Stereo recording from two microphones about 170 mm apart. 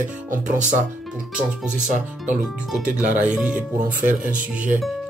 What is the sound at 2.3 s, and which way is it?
Speech, 5° right (ahead or behind).